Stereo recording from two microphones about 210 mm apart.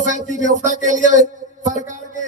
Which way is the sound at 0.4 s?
35° right (ahead or behind).